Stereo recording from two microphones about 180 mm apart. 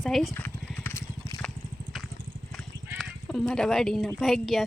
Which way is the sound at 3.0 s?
Centre (ahead or behind).